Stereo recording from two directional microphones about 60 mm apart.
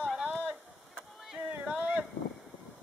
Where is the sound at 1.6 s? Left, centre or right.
Right.